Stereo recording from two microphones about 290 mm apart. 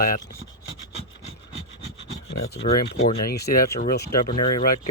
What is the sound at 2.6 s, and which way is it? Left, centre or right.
Speech, left.